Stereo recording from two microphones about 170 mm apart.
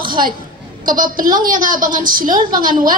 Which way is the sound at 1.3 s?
50° right (ahead or behind).